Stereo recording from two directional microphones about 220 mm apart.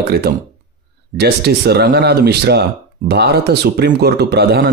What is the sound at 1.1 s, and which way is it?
Speech, 45° right (ahead or behind).